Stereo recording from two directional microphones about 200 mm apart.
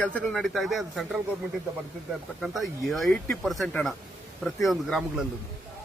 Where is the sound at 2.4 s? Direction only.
Centre (ahead or behind).